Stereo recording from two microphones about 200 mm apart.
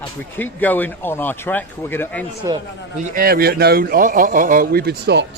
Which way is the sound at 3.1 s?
45° right (ahead or behind).